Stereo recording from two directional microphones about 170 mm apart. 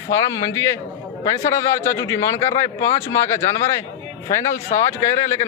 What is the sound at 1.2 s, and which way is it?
A man's voice, 20° left (ahead or behind).